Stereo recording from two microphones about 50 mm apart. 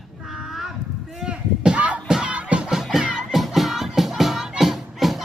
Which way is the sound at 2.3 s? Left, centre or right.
Right.